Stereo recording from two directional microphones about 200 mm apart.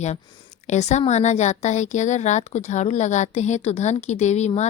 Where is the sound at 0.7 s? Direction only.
35° left (ahead or behind).